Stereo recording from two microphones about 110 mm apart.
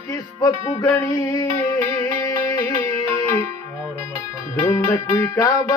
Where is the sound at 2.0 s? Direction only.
30° left (ahead or behind).